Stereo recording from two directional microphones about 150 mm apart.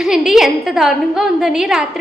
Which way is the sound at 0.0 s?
5° right (ahead or behind).